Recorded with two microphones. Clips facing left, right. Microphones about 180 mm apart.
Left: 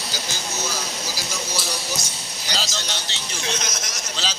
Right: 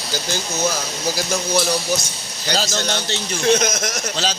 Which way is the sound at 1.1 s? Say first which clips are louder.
Right 13 dB; 55° right (ahead or behind).